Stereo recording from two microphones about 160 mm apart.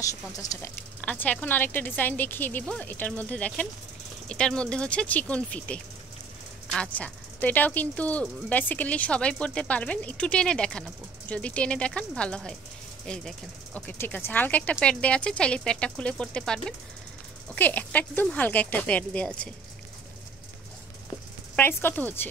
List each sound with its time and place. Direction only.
0.0 s speech: 20° left (ahead or behind)
1.0 s speech: 10° left (ahead or behind)
21.5 s speech: 10° left (ahead or behind)